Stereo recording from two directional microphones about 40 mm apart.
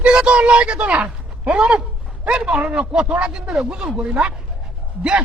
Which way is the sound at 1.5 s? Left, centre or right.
Right.